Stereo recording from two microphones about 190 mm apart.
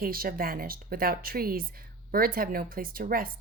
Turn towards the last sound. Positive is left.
turn(degrees=-50)  # may be behind; listen again after turning